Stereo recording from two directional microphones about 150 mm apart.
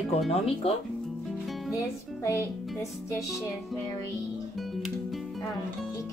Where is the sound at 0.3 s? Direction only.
40° left (ahead or behind).